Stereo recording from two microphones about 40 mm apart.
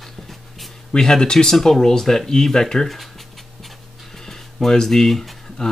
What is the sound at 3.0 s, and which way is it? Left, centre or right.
Pant, centre.